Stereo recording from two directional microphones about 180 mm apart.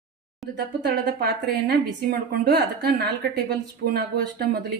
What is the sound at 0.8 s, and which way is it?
Speech, 60° right (ahead or behind).